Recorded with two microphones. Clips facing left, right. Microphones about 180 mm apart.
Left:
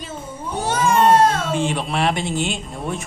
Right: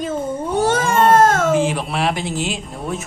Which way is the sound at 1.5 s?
Centre (ahead or behind).